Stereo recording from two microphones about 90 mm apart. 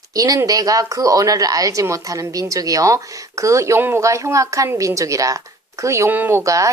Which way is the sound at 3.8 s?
25° right (ahead or behind).